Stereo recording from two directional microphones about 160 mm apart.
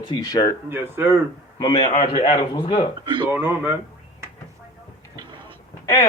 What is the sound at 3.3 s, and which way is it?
Speech, 10° right (ahead or behind).